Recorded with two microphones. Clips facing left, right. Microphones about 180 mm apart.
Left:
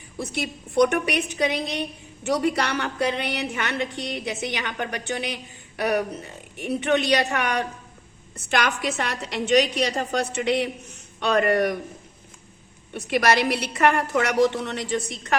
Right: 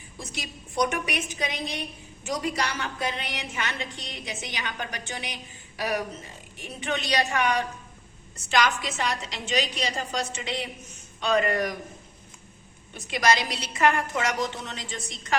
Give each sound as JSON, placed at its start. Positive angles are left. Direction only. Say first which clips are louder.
{"t": 0.2, "sound": "a woman's voice", "louder": "left 9 dB", "side_deg": 60}
{"t": 12.9, "sound": "a woman's voice", "louder": "left 3 dB", "side_deg": 65}